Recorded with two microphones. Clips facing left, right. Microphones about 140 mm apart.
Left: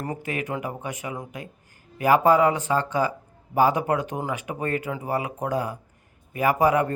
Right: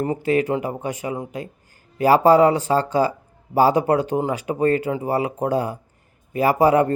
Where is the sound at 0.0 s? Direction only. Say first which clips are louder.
Right 10 dB; 30° right (ahead or behind).